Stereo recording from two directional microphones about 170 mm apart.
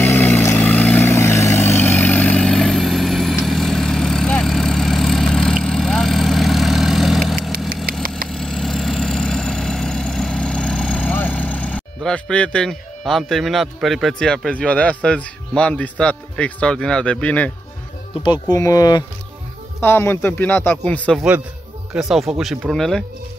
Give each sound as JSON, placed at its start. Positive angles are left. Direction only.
{"t": 0.0, "sound": "vehicle", "side_deg": 15}
{"t": 18.2, "sound": "a man's voice", "side_deg": 25}
{"t": 21.9, "sound": "speech", "side_deg": 0}